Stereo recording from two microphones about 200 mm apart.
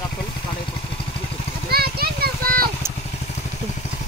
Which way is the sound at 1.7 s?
50° right (ahead or behind).